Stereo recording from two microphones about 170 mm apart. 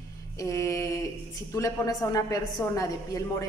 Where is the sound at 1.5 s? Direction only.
20° left (ahead or behind).